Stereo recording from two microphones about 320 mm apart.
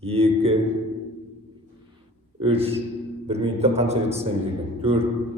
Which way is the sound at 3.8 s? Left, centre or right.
Centre.